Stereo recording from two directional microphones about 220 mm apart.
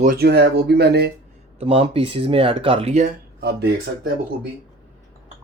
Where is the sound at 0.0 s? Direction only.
40° right (ahead or behind).